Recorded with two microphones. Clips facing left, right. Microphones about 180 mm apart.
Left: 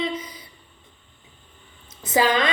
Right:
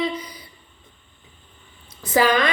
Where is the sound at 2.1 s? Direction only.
20° left (ahead or behind).